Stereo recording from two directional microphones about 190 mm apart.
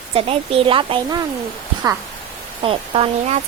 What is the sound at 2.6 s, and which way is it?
Speech, 30° right (ahead or behind).